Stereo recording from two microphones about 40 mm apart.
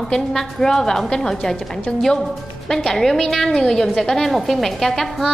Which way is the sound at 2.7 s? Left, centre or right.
Centre.